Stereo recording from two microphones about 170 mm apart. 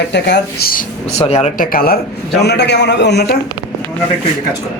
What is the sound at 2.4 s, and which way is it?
Speech, 85° left.